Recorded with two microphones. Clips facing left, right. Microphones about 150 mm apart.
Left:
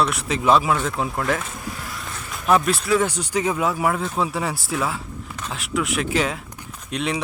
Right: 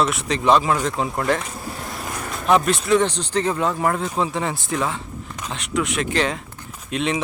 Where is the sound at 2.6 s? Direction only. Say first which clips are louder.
Right 2 dB; centre (ahead or behind).